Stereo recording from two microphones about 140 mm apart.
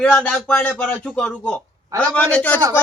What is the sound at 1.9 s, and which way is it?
Speech, 25° right (ahead or behind).